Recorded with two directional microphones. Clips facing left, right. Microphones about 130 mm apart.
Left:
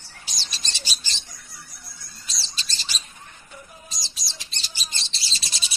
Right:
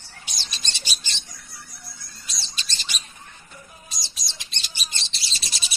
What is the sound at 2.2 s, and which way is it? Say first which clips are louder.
Rodents: even; 30° left (ahead or behind).